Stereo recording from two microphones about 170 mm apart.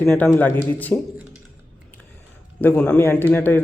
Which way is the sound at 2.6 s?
5° left (ahead or behind).